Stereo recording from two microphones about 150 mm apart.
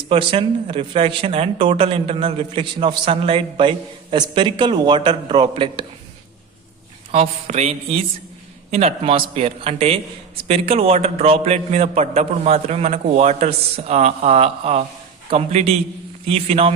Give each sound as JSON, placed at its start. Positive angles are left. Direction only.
{"t": 0.1, "sound": "speech", "side_deg": -35}
{"t": 7.1, "sound": "a man's voice", "side_deg": -45}